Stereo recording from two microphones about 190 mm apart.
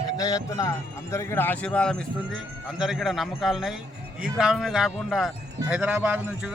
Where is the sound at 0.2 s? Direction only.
20° left (ahead or behind).